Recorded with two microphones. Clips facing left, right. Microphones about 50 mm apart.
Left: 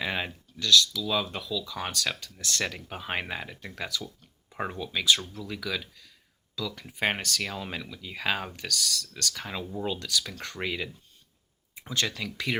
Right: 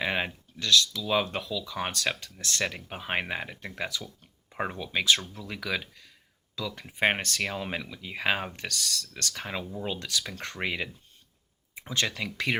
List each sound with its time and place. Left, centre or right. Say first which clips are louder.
0.0 s speech: right 2 dB; right
2.9 s speech: right 2 dB; centre